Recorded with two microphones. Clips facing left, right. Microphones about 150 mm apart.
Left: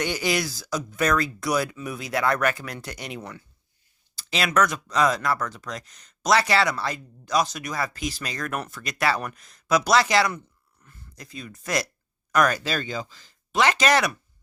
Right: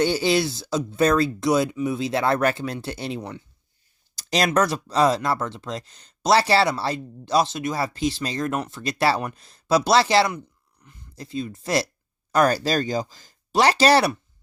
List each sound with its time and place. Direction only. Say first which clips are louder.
0.0 s speech: right 5 dB; 30° right (ahead or behind)
4.1 s speech: right 4 dB; 40° right (ahead or behind)
10.8 s a sound: right 2 dB; 15° right (ahead or behind)
11.1 s speech: right 10 dB; 30° right (ahead or behind)